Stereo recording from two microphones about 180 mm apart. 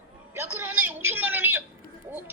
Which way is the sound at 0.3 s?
10° right (ahead or behind).